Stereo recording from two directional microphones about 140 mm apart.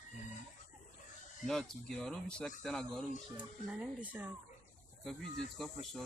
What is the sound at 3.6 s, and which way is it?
Speech, 10° right (ahead or behind).